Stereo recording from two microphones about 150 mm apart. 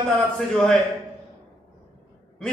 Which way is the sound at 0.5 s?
5° left (ahead or behind).